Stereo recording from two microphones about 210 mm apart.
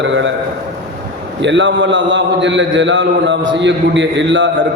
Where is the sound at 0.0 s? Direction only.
60° right (ahead or behind).